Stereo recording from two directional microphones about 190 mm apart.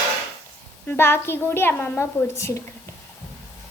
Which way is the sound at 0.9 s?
10° left (ahead or behind).